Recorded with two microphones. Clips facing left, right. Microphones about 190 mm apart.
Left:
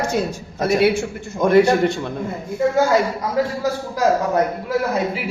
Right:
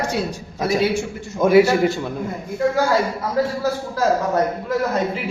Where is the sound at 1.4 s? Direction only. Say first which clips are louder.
Even; 5° right (ahead or behind).